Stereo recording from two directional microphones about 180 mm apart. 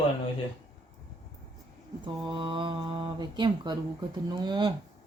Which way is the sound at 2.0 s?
25° right (ahead or behind).